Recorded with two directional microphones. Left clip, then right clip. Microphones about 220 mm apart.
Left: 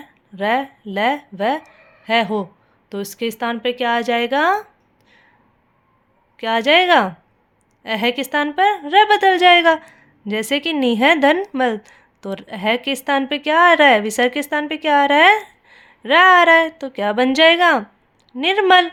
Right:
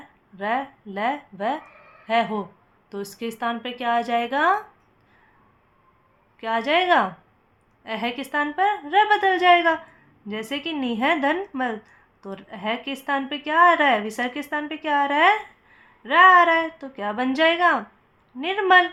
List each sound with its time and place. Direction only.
0.3 s speech: 40° left (ahead or behind)
6.3 s a woman's voice: 40° left (ahead or behind)